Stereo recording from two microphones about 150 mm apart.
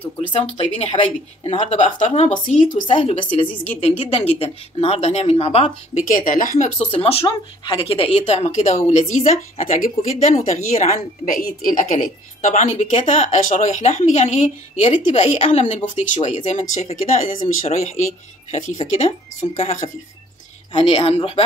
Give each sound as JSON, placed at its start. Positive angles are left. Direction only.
{"t": 0.3, "sound": "a woman's voice", "side_deg": 35}
{"t": 3.2, "sound": "a woman's voice", "side_deg": 35}
{"t": 6.0, "sound": "speech", "side_deg": 65}
{"t": 6.6, "sound": "a woman's voice", "side_deg": 45}
{"t": 8.2, "sound": "speech", "side_deg": 50}